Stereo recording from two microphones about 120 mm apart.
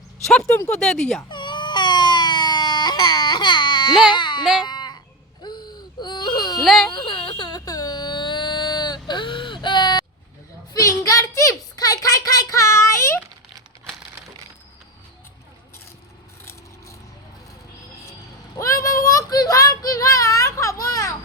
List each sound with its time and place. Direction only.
0.3 s speech: 10° left (ahead or behind)
1.3 s baby cry: 40° left (ahead or behind)
4.6 s sheep: 35° left (ahead or behind)
5.4 s baby cry: 35° left (ahead or behind)
6.6 s a sound: centre (ahead or behind)
6.9 s a sound: 45° left (ahead or behind); by 13.1 s 25° left (ahead or behind)
18.5 s child singing: 25° left (ahead or behind)